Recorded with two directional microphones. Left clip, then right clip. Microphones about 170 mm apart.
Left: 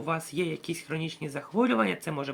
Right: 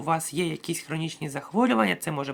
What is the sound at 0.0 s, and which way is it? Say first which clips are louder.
Speech: right 4 dB; 35° right (ahead or behind).